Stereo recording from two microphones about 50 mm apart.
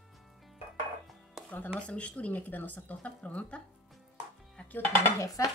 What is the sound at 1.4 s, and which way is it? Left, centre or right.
Music, left.